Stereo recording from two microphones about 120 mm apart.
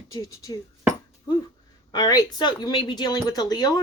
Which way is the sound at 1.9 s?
35° left (ahead or behind).